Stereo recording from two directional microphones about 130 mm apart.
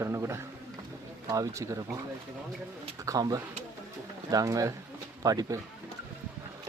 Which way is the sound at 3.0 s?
30° right (ahead or behind).